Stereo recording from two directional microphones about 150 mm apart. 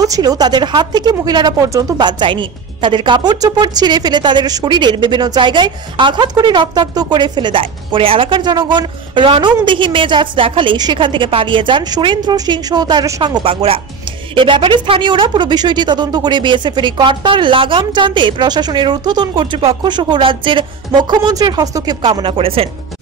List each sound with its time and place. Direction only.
0.0 s speech: 25° right (ahead or behind)